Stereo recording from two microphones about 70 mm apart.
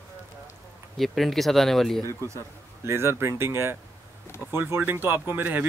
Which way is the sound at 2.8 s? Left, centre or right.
Right.